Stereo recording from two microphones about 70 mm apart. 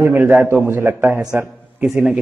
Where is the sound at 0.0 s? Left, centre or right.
Right.